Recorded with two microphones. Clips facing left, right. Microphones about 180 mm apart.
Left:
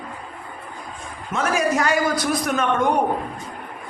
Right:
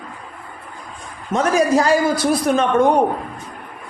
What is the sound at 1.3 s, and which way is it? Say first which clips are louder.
A man's voice: right 5 dB; 35° right (ahead or behind).